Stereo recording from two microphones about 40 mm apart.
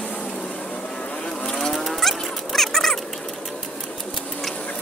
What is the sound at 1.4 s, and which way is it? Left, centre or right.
Vehicle, centre.